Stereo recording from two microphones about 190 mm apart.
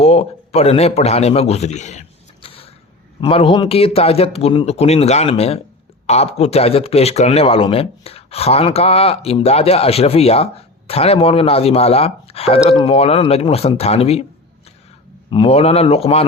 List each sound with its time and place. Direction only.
0.0 s a man's voice: 30° left (ahead or behind)
15.3 s speech: 30° left (ahead or behind)